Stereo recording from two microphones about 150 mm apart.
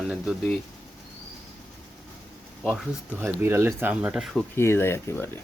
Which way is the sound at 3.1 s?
15° right (ahead or behind).